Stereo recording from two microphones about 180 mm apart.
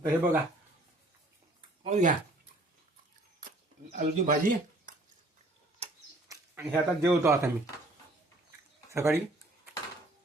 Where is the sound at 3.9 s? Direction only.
45° right (ahead or behind).